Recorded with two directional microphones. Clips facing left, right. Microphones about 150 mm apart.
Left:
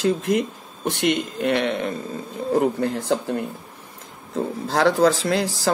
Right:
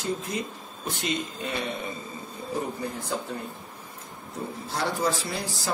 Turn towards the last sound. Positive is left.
turn(degrees=90)